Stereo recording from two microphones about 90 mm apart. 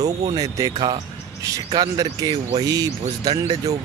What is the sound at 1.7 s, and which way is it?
Speech, 50° right (ahead or behind).